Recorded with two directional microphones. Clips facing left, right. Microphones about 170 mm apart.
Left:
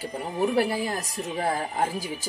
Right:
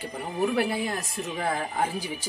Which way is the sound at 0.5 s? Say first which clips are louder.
Left 2 dB; 35° left (ahead or behind).